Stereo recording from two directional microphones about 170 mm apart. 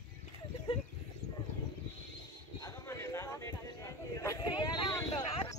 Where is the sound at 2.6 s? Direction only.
15° left (ahead or behind).